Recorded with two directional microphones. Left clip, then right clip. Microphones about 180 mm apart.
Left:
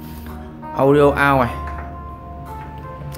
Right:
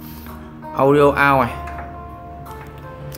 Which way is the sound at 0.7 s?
Centre (ahead or behind).